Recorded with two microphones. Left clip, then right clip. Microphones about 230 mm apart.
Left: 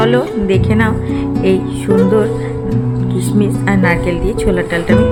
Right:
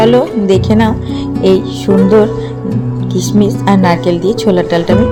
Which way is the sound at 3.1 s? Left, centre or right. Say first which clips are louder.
Right 5 dB; centre.